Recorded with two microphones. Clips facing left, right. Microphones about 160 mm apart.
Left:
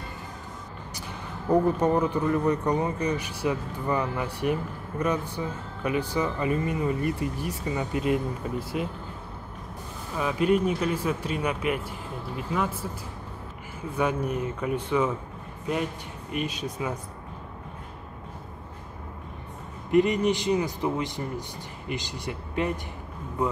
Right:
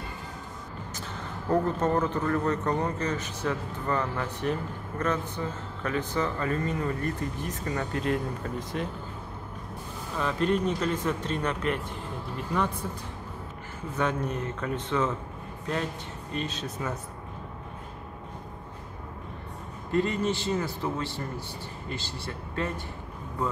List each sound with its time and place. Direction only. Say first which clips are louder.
1.5 s speech: left 3 dB; 10° left (ahead or behind)
10.1 s speech: left 3 dB; 10° left (ahead or behind)
13.9 s speech: left 2 dB; 10° left (ahead or behind)
19.9 s speech: left 5 dB; 15° left (ahead or behind)